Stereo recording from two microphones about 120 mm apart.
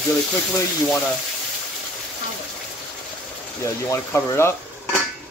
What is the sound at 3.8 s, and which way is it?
Speech, 25° left (ahead or behind).